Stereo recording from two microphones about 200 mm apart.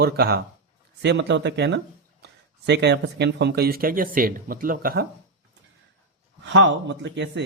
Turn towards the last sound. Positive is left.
turn(degrees=-60)  # may be behind; listen again after turning